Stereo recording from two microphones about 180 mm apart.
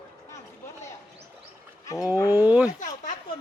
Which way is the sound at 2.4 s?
10° right (ahead or behind).